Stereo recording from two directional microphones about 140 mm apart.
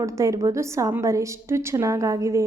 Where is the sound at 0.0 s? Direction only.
20° right (ahead or behind).